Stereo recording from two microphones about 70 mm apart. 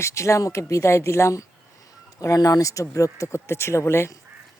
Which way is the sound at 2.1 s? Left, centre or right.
Left.